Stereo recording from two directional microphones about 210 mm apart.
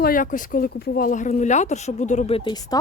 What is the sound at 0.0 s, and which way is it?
Speech, 40° left (ahead or behind).